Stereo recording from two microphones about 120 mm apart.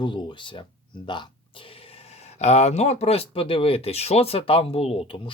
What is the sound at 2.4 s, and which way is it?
Speech, 65° left (ahead or behind).